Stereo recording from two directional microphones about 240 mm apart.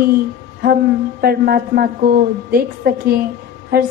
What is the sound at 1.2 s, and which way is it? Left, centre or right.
A woman's voice, right.